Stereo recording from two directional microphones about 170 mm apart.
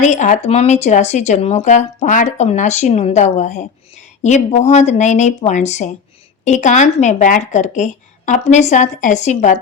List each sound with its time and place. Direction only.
0.0 s speech: 45° left (ahead or behind)